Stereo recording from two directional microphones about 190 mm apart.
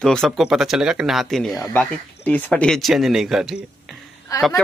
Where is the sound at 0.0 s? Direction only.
Centre (ahead or behind).